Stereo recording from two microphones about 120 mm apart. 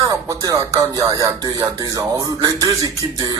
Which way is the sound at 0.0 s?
30° right (ahead or behind).